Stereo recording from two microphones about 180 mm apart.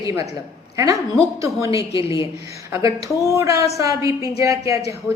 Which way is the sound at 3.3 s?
15° right (ahead or behind).